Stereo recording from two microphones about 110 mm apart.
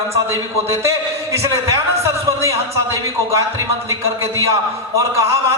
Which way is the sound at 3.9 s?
25° right (ahead or behind).